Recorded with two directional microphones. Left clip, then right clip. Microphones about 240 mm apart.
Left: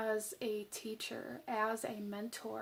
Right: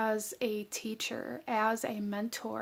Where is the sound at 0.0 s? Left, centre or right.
Right.